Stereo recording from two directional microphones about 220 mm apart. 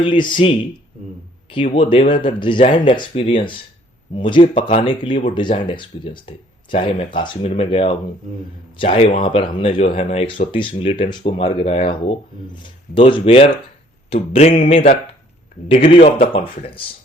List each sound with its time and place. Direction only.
0.0 s speech: 20° left (ahead or behind)
1.6 s speech: 30° left (ahead or behind)
15.9 s speech: 25° left (ahead or behind)